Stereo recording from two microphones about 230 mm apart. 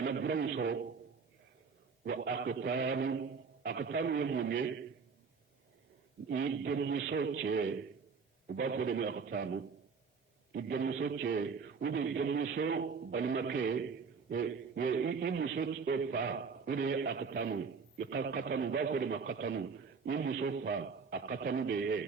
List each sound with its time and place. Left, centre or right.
0.0 s a man's voice: right
2.0 s a man's voice: right
6.2 s a man's voice: right